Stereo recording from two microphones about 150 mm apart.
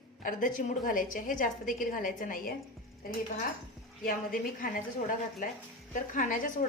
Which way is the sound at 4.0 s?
70° left (ahead or behind).